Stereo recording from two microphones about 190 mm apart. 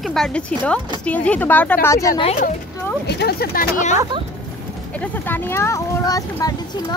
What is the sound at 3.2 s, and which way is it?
Speech, 55° left (ahead or behind).